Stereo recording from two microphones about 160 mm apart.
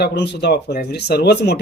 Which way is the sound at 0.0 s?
90° left.